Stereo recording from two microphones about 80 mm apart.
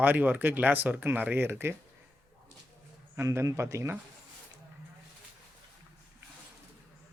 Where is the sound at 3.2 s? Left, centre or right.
Right.